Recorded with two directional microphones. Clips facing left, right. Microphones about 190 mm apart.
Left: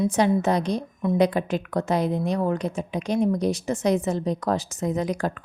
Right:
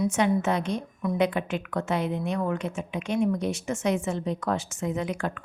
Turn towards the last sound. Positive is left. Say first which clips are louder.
# left 4 dB
turn(degrees=35)  # may be behind; listen again after turning